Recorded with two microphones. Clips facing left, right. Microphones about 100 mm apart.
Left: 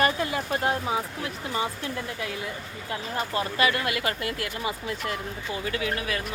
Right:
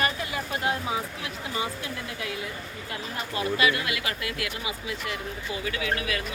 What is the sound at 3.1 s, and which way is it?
Speech, 40° left (ahead or behind).